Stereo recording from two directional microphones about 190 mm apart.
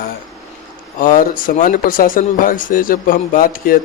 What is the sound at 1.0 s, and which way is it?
Speech, 45° left (ahead or behind).